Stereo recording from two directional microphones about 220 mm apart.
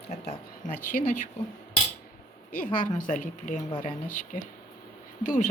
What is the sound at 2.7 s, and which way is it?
Speech, 35° left (ahead or behind).